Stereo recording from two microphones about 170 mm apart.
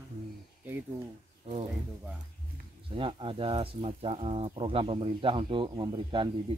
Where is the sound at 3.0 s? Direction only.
30° right (ahead or behind).